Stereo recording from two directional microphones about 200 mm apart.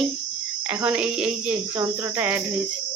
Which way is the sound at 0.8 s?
5° right (ahead or behind).